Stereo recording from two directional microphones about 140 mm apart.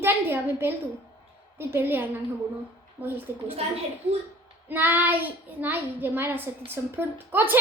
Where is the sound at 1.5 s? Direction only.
15° right (ahead or behind).